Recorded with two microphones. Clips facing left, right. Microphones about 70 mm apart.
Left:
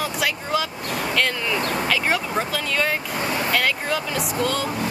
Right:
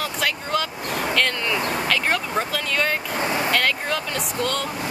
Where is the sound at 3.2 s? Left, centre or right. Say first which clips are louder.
Right 2 dB; right.